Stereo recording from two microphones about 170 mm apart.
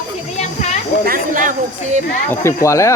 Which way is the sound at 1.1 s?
50° right (ahead or behind).